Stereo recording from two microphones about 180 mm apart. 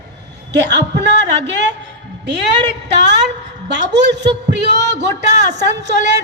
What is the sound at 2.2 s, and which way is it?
A woman's voice, 75° right (ahead or behind).